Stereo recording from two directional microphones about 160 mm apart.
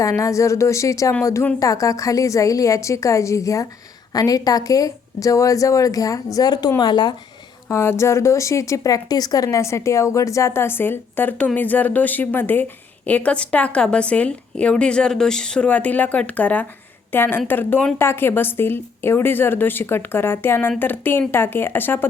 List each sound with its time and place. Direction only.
0.0 s a woman's voice: 20° left (ahead or behind)
7.7 s speech: 15° left (ahead or behind)